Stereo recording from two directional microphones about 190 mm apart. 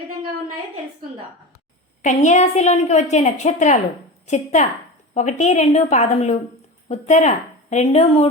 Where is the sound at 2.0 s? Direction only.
40° left (ahead or behind).